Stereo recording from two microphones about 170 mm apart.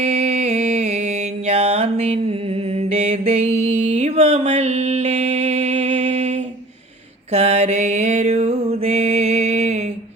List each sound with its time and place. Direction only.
0.0 s mantra: 40° right (ahead or behind)
6.0 s a sound: 45° right (ahead or behind)
7.3 s mantra: 40° right (ahead or behind)